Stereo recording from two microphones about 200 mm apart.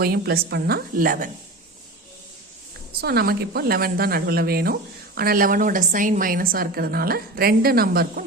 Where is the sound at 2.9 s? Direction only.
50° right (ahead or behind).